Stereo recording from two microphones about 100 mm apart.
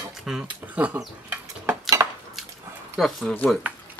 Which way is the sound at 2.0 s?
35° right (ahead or behind).